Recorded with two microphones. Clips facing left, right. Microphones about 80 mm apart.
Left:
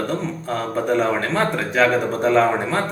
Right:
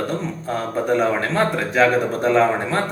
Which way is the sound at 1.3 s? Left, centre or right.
Centre.